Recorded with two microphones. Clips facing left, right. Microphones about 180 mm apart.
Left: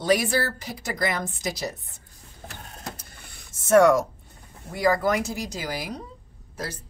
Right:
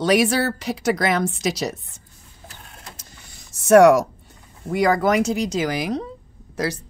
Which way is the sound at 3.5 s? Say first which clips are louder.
Right 5 dB; 75° right (ahead or behind).